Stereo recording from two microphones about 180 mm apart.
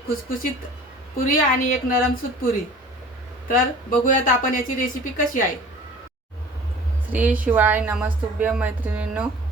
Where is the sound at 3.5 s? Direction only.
50° left (ahead or behind).